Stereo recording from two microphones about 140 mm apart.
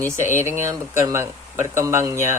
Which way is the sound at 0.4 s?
20° right (ahead or behind).